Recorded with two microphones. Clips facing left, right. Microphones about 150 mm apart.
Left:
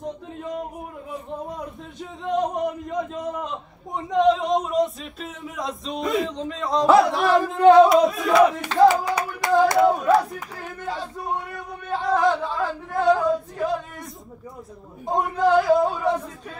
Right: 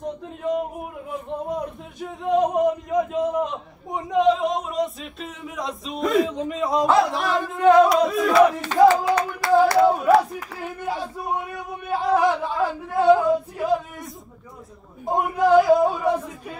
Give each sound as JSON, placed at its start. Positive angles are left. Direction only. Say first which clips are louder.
{"t": 2.0, "sound": "a man's voice", "louder": "right 4 dB", "side_deg": -5}
{"t": 7.6, "sound": "singing", "louder": "left 2 dB", "side_deg": 30}
{"t": 7.9, "sound": "crowd", "louder": "left 1 dB", "side_deg": 0}
{"t": 8.8, "sound": "clapping", "louder": "right 1 dB", "side_deg": 10}
{"t": 9.8, "sound": "a sound", "louder": "right 1 dB", "side_deg": -5}
{"t": 13.3, "sound": "yodeling", "louder": "right 3 dB", "side_deg": -5}
{"t": 15.0, "sound": "a sound", "louder": "right 1 dB", "side_deg": -10}